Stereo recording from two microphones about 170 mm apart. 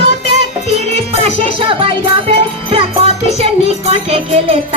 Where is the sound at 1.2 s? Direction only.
35° right (ahead or behind).